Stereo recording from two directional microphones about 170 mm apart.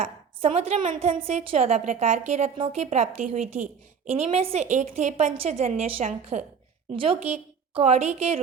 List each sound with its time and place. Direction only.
0.4 s a woman's voice: 35° right (ahead or behind); by 3.7 s 55° right (ahead or behind)
4.2 s a woman's voice: 35° right (ahead or behind)